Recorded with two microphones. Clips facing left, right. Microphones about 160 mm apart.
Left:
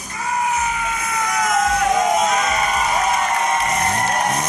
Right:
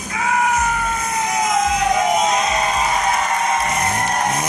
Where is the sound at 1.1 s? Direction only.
25° right (ahead or behind).